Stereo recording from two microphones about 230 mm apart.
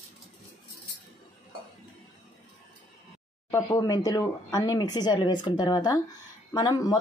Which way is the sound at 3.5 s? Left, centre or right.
Centre.